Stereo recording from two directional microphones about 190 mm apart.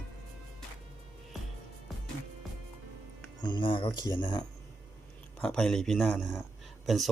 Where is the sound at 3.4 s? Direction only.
25° left (ahead or behind).